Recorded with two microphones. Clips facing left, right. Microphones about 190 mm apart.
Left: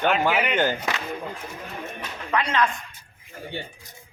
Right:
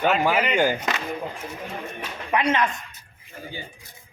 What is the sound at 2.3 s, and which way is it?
Speech, 20° right (ahead or behind).